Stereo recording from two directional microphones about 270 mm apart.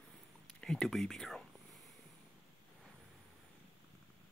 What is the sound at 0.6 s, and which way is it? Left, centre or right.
Speech, centre.